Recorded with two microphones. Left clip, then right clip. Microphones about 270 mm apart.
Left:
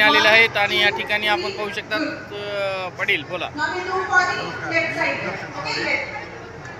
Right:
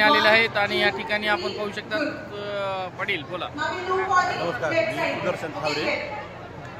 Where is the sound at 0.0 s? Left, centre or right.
Centre.